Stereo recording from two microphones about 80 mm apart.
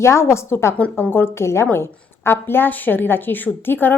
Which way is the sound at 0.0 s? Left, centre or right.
Left.